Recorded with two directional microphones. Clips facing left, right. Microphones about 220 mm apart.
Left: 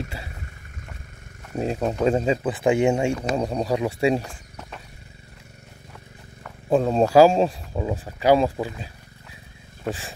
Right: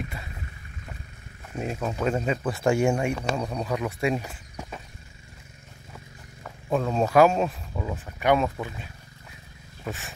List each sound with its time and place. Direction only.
1.5 s speech: 35° left (ahead or behind)
2.5 s speech: 20° left (ahead or behind)
3.3 s speech: 35° left (ahead or behind)
4.2 s a sound: 5° right (ahead or behind)
6.7 s speech: 30° left (ahead or behind)